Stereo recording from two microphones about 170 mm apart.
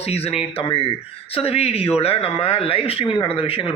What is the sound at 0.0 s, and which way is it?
A man's voice, 35° left (ahead or behind).